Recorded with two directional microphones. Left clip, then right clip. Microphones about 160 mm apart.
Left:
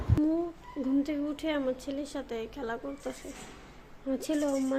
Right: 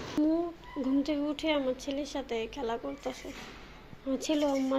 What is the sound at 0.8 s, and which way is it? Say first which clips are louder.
A woman's voice: even; 20° left (ahead or behind).